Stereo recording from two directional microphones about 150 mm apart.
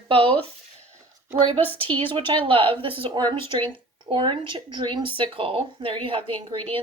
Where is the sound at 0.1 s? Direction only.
35° right (ahead or behind).